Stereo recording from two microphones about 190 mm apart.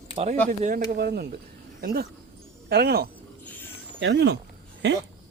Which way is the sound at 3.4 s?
10° left (ahead or behind).